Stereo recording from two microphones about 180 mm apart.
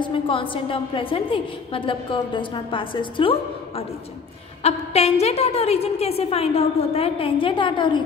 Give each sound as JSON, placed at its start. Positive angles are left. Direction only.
{"t": 0.0, "sound": "a woman's voice", "side_deg": 30}